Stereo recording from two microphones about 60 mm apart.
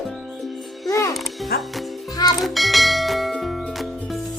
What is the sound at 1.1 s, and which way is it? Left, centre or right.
Music, centre.